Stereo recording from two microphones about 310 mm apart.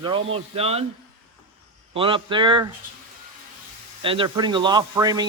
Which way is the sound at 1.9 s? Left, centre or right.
Centre.